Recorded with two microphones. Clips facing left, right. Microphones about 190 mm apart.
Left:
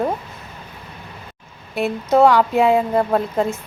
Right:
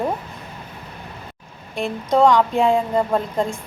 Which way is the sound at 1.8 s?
5° left (ahead or behind).